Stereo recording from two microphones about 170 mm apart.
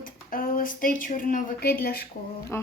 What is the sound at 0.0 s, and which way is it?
A woman's voice, 55° left (ahead or behind).